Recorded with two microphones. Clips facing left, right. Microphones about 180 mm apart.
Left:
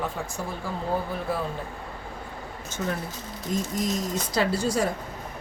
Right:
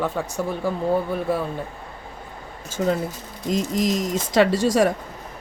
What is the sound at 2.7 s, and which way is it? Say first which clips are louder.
Speech: right 8 dB; 90° right.